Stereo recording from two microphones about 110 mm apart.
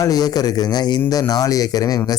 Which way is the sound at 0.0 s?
35° left (ahead or behind).